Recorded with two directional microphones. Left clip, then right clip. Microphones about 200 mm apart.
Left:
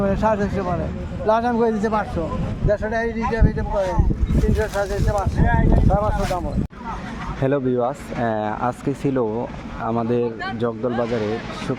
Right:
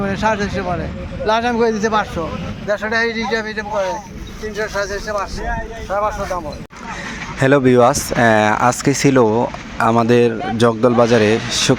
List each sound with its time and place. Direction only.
0.0 s a man's voice: 40° left (ahead or behind)
2.6 s speech: 15° left (ahead or behind)
5.9 s speech: 15° left (ahead or behind)
7.3 s speech: 10° right (ahead or behind)